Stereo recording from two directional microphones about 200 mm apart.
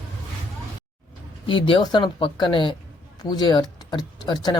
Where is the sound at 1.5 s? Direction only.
25° left (ahead or behind).